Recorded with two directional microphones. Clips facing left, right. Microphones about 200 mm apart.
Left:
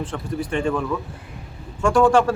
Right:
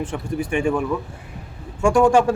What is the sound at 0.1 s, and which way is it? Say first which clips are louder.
A man's voice: right 2 dB; 15° right (ahead or behind).